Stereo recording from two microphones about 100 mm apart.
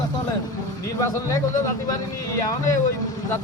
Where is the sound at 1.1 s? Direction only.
30° left (ahead or behind).